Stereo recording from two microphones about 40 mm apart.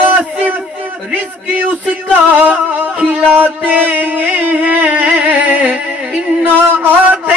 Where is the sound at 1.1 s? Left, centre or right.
Right.